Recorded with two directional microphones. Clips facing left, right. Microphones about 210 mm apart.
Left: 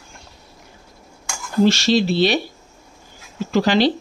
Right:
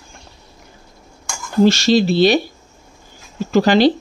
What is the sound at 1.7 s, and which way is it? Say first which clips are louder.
Speech: right 3 dB; 45° right (ahead or behind).